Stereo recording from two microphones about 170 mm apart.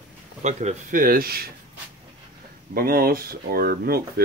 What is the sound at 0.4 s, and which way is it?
Speech, 45° right (ahead or behind).